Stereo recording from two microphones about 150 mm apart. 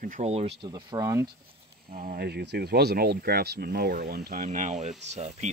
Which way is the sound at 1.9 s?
75° right (ahead or behind).